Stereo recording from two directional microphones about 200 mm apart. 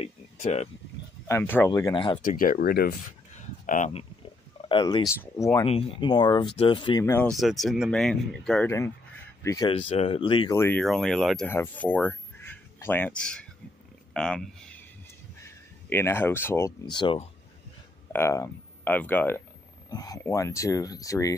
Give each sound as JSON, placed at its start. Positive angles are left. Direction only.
{"t": 0.0, "sound": "a sound", "side_deg": 35}
{"t": 1.2, "sound": "speech", "side_deg": 10}
{"t": 2.2, "sound": "speech", "side_deg": 45}
{"t": 3.6, "sound": "speech", "side_deg": 40}
{"t": 4.6, "sound": "speech", "side_deg": 25}
{"t": 5.7, "sound": "speech", "side_deg": 30}
{"t": 7.3, "sound": "speech", "side_deg": 0}
{"t": 9.7, "sound": "speech", "side_deg": 30}
{"t": 10.5, "sound": "speech", "side_deg": 10}
{"t": 16.9, "sound": "speech", "side_deg": 25}
{"t": 18.1, "sound": "speech", "side_deg": 15}